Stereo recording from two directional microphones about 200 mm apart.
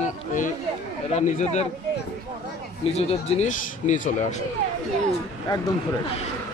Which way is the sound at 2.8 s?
30° left (ahead or behind).